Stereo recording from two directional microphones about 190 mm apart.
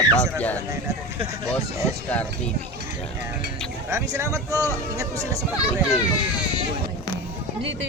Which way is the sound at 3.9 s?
15° right (ahead or behind).